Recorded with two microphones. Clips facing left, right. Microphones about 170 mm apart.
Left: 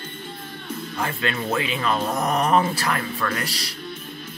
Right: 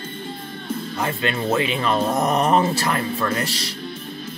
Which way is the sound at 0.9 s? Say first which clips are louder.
Right 2 dB; 25° right (ahead or behind).